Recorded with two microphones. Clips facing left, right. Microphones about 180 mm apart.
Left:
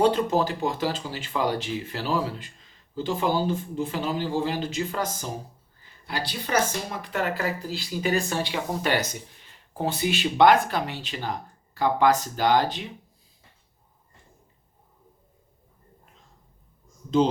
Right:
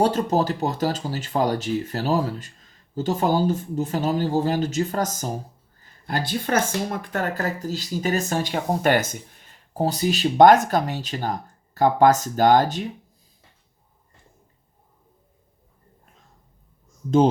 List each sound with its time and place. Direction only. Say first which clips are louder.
0.0 s speech: right 1 dB; 40° right (ahead or behind)